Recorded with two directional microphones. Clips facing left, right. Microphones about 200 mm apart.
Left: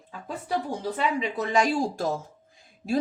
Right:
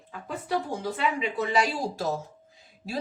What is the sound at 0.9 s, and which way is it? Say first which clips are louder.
A child's voice: left 1 dB; 40° left (ahead or behind).